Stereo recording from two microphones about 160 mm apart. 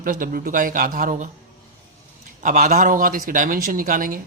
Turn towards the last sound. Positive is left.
turn(degrees=-60)  # may be behind; listen again after turning